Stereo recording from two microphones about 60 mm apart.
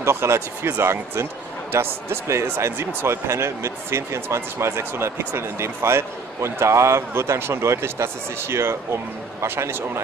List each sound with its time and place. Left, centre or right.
0.0 s speech: right